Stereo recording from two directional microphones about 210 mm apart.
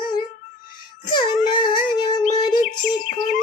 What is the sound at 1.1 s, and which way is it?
Dog, 20° left (ahead or behind).